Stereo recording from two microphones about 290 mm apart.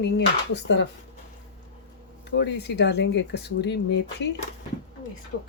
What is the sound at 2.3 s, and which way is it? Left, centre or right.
Speech, left.